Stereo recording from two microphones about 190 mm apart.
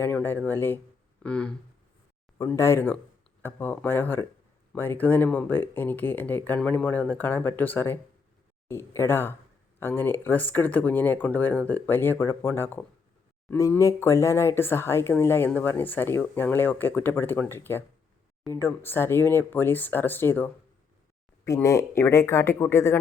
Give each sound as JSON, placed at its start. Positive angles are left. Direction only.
{"t": 0.0, "sound": "speech", "side_deg": 10}